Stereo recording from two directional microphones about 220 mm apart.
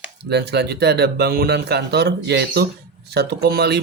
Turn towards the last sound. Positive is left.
turn(degrees=-45)  # may be behind; listen again after turning